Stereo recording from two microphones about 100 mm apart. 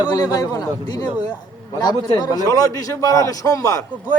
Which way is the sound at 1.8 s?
40° left (ahead or behind).